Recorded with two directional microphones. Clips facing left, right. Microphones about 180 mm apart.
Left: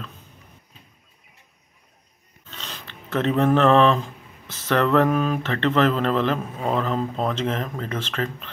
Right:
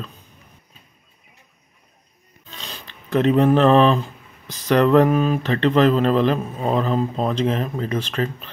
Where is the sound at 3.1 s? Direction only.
15° right (ahead or behind).